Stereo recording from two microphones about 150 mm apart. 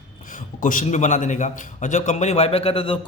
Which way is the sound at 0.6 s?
60° left (ahead or behind).